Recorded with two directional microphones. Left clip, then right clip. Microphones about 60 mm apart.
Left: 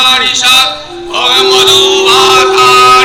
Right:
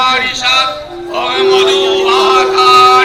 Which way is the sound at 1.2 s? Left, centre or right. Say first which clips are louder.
Left 4 dB; right.